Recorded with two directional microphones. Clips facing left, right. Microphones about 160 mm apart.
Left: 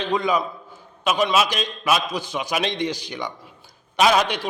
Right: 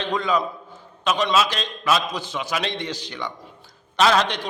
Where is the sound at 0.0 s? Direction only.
10° left (ahead or behind).